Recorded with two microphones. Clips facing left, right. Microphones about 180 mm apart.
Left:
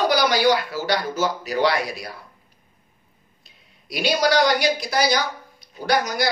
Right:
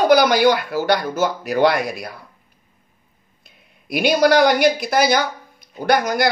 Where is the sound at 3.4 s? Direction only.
55° right (ahead or behind).